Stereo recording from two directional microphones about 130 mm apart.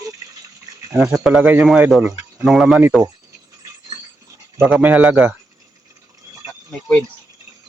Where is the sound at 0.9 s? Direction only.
5° right (ahead or behind).